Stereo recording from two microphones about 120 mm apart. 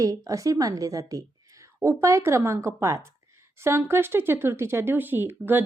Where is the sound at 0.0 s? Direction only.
30° right (ahead or behind).